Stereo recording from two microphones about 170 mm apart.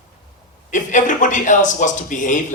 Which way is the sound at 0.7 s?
50° left (ahead or behind).